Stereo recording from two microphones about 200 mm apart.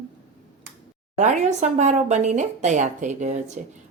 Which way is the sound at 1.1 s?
35° right (ahead or behind).